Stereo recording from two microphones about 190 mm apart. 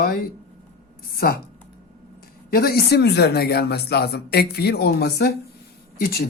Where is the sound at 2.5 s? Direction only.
55° left (ahead or behind).